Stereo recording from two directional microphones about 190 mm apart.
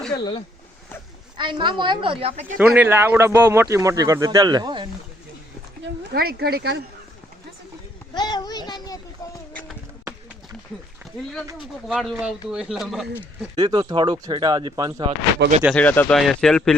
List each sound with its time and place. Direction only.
1.4 s speech: 25° right (ahead or behind)
2.6 s speech: 15° right (ahead or behind)
5.8 s speech: 55° right (ahead or behind)
8.1 s speech: 20° left (ahead or behind)
11.0 s speech: centre (ahead or behind)
13.6 s speech: 20° right (ahead or behind)
15.7 s speech: 10° left (ahead or behind)